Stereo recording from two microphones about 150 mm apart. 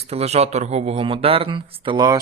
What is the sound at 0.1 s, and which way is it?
Speech, 45° right (ahead or behind).